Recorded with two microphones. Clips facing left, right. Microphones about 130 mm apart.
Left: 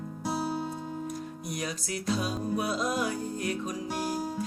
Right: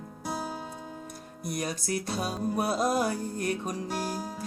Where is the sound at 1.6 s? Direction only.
45° right (ahead or behind).